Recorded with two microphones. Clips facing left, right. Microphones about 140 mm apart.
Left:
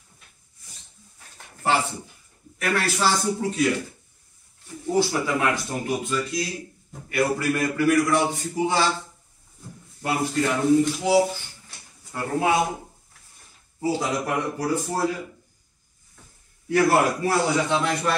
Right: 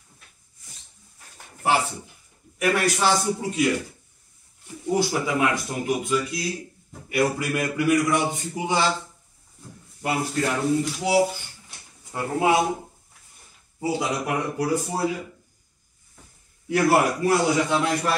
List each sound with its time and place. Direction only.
2.6 s speech: 15° right (ahead or behind)
4.9 s speech: 10° right (ahead or behind)
10.0 s speech: 5° right (ahead or behind)
12.0 s speech: 20° right (ahead or behind)
13.7 s speech: 10° right (ahead or behind)
16.6 s speech: 15° right (ahead or behind)